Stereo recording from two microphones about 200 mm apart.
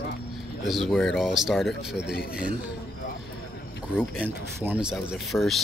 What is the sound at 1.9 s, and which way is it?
Speech, 55° left (ahead or behind).